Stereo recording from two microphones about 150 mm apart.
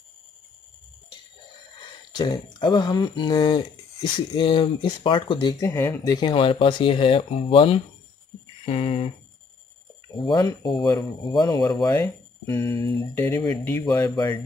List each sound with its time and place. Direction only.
2.1 s speech: 30° left (ahead or behind)
6.1 s speech: 35° left (ahead or behind)
10.1 s speech: 30° left (ahead or behind)
12.4 s speech: 35° right (ahead or behind)
13.2 s speech: 15° left (ahead or behind)